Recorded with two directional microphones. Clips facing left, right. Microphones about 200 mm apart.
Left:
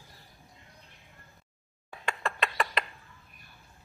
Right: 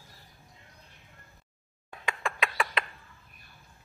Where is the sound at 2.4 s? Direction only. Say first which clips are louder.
Even; centre (ahead or behind).